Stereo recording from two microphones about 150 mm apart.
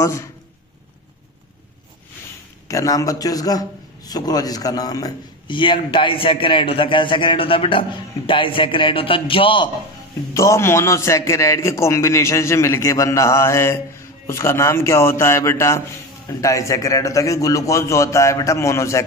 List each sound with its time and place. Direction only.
0.0 s a man's voice: 20° left (ahead or behind)
2.7 s a man's voice: 20° left (ahead or behind)
10.3 s a man's voice: 20° left (ahead or behind)